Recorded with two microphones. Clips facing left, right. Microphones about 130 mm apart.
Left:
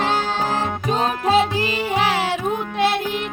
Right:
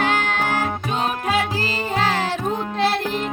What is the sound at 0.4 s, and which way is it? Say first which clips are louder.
Music: left 1 dB; 35° left (ahead or behind).